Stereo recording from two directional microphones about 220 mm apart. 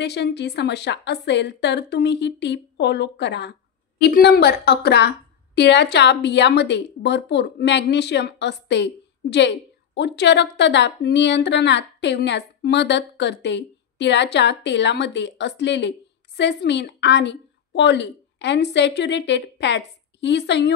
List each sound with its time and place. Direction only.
0.0 s a woman's voice: 50° left (ahead or behind)